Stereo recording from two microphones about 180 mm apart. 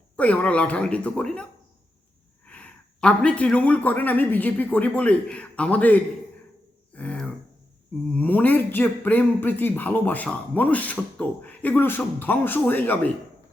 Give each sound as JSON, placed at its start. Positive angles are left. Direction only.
{"t": 0.2, "sound": "speech", "side_deg": 5}
{"t": 2.5, "sound": "speech", "side_deg": 5}
{"t": 6.9, "sound": "a sound", "side_deg": 5}
{"t": 8.1, "sound": "speech", "side_deg": 10}